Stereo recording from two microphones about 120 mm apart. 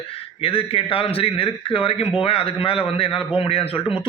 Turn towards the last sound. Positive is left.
turn(degrees=50)  # may be behind; listen again after turning